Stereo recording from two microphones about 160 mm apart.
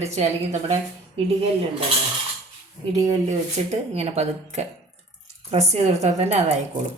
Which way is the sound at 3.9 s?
40° right (ahead or behind).